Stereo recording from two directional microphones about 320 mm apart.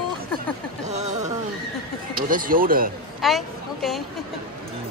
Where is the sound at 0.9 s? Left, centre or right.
Right.